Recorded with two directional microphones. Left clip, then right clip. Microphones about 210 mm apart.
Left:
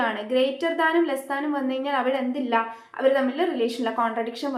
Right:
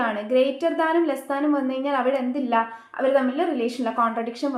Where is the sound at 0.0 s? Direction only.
35° right (ahead or behind).